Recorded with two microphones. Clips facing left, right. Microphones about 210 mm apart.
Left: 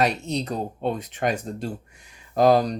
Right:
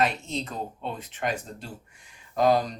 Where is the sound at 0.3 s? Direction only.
40° left (ahead or behind).